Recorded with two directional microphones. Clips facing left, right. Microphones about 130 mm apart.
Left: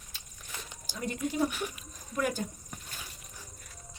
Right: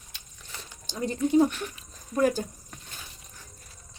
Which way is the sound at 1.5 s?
10° left (ahead or behind).